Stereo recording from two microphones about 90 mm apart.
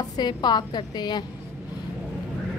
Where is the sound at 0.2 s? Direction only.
55° left (ahead or behind).